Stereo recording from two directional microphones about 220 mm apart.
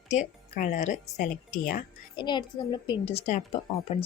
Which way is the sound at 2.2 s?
20° left (ahead or behind).